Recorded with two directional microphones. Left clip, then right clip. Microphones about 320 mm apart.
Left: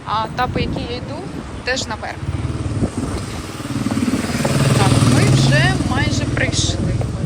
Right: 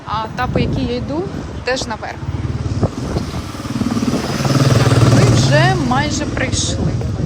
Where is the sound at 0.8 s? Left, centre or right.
Centre.